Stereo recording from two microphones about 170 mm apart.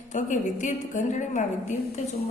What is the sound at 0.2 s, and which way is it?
A woman's voice, 45° left (ahead or behind).